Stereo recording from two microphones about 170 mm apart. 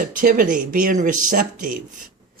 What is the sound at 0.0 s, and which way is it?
Speech, 55° right (ahead or behind).